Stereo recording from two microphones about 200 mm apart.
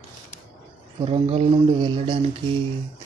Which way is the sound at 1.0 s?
30° right (ahead or behind).